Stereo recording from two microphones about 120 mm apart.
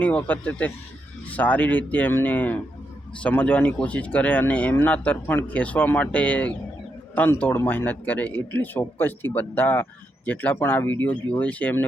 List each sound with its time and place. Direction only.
0.0 s speech: 10° left (ahead or behind)